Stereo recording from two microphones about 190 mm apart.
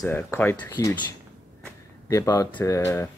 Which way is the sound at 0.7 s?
20° left (ahead or behind).